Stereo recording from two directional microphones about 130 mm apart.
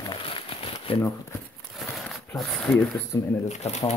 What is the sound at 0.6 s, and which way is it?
Crumpling, 45° left (ahead or behind).